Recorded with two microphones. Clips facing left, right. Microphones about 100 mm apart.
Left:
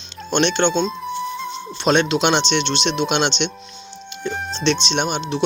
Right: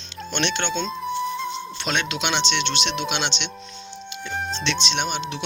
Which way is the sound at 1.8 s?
30° left (ahead or behind).